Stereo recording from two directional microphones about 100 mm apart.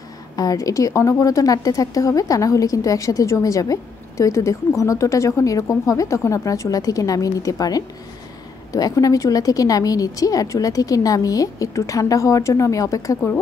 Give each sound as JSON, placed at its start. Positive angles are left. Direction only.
{"t": 0.4, "sound": "a woman's voice", "side_deg": 35}